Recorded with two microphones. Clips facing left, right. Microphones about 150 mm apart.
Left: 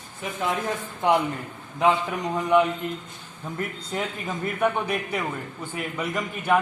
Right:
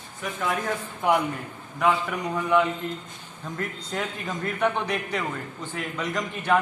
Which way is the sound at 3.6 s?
10° left (ahead or behind).